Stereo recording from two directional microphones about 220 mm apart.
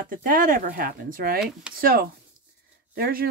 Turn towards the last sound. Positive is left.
turn(degrees=-40)  # may be behind; listen again after turning